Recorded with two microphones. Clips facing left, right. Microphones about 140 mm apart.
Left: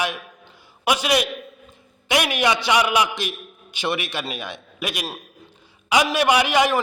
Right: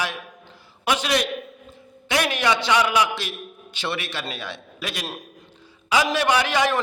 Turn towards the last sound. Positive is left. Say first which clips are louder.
# left 2 dB
turn(degrees=15)  # may be behind; listen again after turning